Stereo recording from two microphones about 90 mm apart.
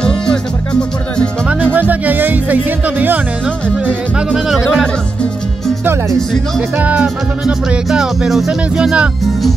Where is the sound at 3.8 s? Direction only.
10° right (ahead or behind).